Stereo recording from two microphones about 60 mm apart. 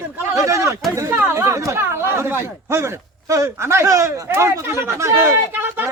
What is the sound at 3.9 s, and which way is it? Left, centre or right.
Speech, right.